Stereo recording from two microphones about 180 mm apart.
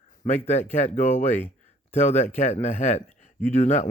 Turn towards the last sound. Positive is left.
turn(degrees=40)  # may be behind; listen again after turning